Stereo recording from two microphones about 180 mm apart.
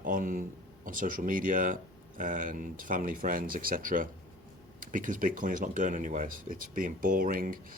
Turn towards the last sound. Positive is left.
turn(degrees=-50)  # may be behind; listen again after turning